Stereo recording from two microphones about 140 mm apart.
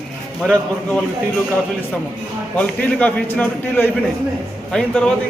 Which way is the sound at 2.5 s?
10° left (ahead or behind).